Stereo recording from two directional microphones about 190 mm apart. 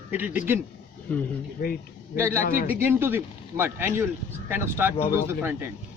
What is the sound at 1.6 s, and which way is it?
Speech, 50° left (ahead or behind).